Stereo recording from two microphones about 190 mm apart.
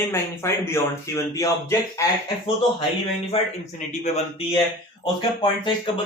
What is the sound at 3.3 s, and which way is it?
A man's voice, 35° left (ahead or behind).